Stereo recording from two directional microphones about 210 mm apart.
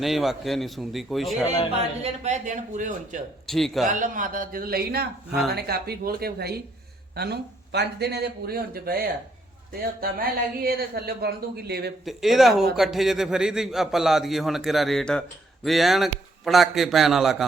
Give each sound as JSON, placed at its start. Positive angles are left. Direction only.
{"t": 0.0, "sound": "a man's voice", "side_deg": 0}
{"t": 2.2, "sound": "speech", "side_deg": -35}
{"t": 3.4, "sound": "a man's voice", "side_deg": 0}
{"t": 3.8, "sound": "speech", "side_deg": -40}
{"t": 12.0, "sound": "a man's voice", "side_deg": 0}